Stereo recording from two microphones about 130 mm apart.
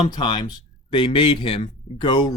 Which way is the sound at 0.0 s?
35° left (ahead or behind).